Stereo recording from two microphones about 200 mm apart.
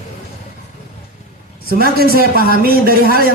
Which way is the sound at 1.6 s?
50° right (ahead or behind).